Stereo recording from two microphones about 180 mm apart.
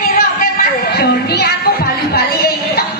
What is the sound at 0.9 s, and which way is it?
Music, 65° left (ahead or behind).